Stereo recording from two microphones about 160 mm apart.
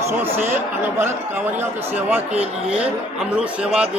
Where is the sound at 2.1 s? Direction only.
10° right (ahead or behind).